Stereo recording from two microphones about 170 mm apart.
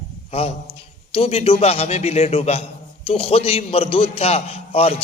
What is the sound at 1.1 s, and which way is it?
A man's voice, 35° left (ahead or behind).